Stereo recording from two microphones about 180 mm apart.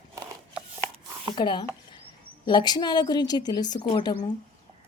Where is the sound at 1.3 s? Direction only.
25° left (ahead or behind).